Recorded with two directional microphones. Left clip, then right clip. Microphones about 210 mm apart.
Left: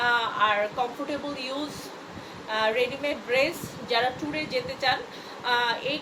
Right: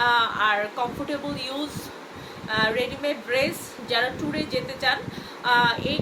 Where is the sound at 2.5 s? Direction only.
15° right (ahead or behind).